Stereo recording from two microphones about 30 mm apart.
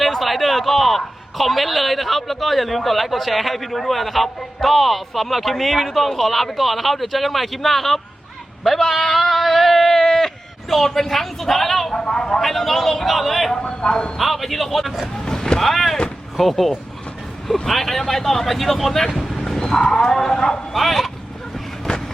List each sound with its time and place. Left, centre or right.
0.0 s a man's voice: centre
11.9 s speech: left
12.4 s a man's voice: centre
13.6 s speech: left
14.2 s a man's voice: centre
15.1 s vehicle: left
15.5 s a man's voice: centre
19.4 s livestock: centre
20.1 s speech: centre
20.7 s a man's voice: centre
21.9 s vehicle: left